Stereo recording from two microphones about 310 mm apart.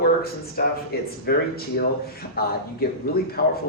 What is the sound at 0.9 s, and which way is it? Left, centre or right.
Speech, left.